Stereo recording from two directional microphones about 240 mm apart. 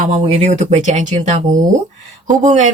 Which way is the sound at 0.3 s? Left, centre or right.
Right.